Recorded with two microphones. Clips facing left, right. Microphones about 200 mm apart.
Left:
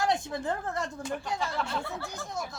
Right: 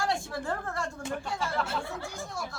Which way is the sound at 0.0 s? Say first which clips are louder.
Left 2 dB; 20° left (ahead or behind).